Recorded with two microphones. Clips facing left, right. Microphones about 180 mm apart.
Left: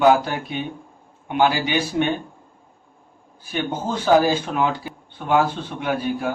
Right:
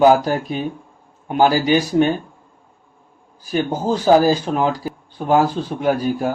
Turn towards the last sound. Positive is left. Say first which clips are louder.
# right 5 dB
turn(degrees=-40)  # may be behind; listen again after turning